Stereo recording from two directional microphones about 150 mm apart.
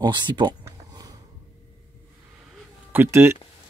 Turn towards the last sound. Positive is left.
turn(degrees=-15)  # may be behind; listen again after turning